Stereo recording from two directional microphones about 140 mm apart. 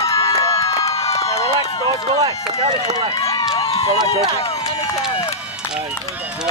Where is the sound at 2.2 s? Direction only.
30° right (ahead or behind).